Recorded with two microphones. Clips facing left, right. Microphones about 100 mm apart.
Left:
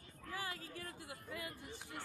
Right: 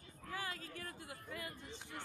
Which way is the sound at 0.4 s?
25° left (ahead or behind).